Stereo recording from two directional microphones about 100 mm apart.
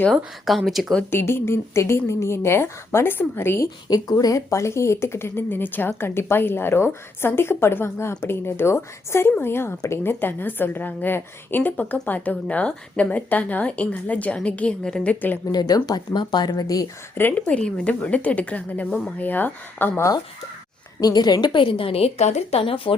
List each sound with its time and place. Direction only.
0.4 s speech: centre (ahead or behind)
1.1 s a woman's voice: 25° left (ahead or behind)
3.8 s a woman's voice: 40° left (ahead or behind); by 15.4 s 15° left (ahead or behind)
15.5 s speech: 40° left (ahead or behind)
17.2 s a woman's voice: 20° left (ahead or behind)
21.0 s a woman's voice: 45° left (ahead or behind); by 23.0 s 65° left (ahead or behind)